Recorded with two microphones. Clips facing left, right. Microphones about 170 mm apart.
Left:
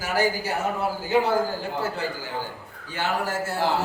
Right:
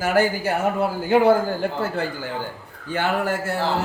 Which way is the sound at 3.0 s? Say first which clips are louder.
Right 5 dB; 55° right (ahead or behind).